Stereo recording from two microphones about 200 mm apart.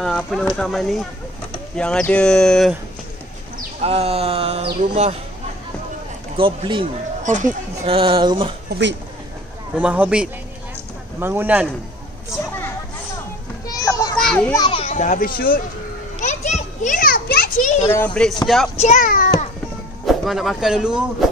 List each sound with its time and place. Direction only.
0.0 s speech: centre (ahead or behind)
3.8 s speech: 30° right (ahead or behind)
6.3 s speech: 25° right (ahead or behind)
8.6 s speech: 60° right (ahead or behind)
9.8 s speech: 5° right (ahead or behind)
13.7 s children playing: 15° left (ahead or behind)
14.1 s children playing: 5° left (ahead or behind)
14.5 s a child's voice: 25° left (ahead or behind); by 15.6 s 45° left (ahead or behind)
16.2 s children playing: 35° left (ahead or behind)
17.8 s speech: 10° left (ahead or behind)
18.8 s a child's voice: 40° left (ahead or behind)
20.1 s speech: centre (ahead or behind)